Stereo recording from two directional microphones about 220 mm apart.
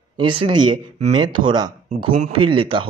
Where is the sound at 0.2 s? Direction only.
20° right (ahead or behind).